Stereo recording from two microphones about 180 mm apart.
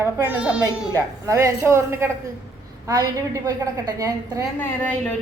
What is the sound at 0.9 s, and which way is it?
A woman's voice, 15° right (ahead or behind).